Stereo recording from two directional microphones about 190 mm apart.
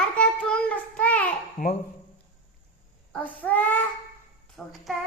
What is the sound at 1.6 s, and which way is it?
Speech, 40° left (ahead or behind).